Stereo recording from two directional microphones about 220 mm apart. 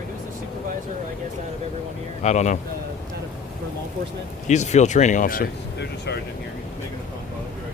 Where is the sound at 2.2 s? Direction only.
30° left (ahead or behind).